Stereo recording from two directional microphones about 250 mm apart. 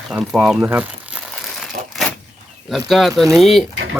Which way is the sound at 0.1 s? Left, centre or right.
Centre.